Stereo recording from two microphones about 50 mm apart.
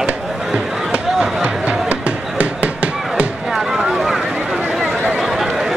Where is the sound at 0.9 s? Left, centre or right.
Right.